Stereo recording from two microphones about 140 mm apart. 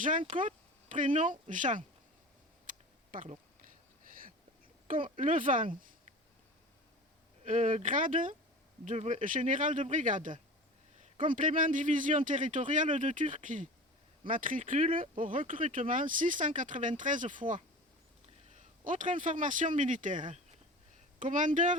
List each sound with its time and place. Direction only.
0.0 s speech: 70° right (ahead or behind)
2.6 s a sound: 70° right (ahead or behind)
4.1 s a sound: 90° right
5.1 s speech: 70° right (ahead or behind)
7.4 s speech: 65° right (ahead or behind)
8.8 s speech: 55° right (ahead or behind)
18.9 s speech: 65° right (ahead or behind)